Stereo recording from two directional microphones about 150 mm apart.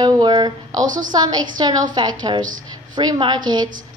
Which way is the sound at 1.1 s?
30° right (ahead or behind).